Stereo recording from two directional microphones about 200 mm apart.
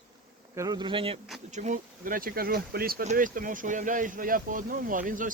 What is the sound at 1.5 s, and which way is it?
Speech, 40° right (ahead or behind).